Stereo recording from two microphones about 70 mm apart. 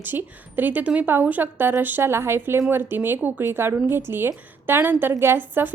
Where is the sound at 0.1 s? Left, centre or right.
Right.